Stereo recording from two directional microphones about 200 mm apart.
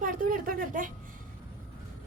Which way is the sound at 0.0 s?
45° right (ahead or behind).